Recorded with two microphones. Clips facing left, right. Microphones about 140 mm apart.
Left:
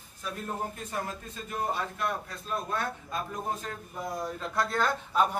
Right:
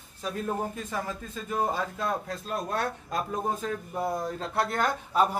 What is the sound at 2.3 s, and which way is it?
Speech, 85° right.